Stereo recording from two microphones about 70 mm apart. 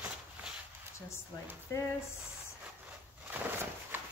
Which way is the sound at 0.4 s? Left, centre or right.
Right.